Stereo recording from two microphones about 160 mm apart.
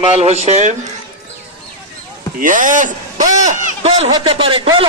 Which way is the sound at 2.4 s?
55° right (ahead or behind).